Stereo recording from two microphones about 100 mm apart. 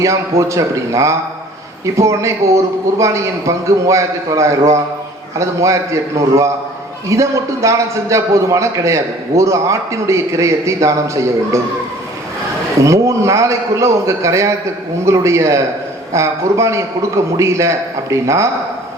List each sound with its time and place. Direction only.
0.0 s a man's voice: 30° right (ahead or behind)
12.8 s a man's voice: 30° right (ahead or behind)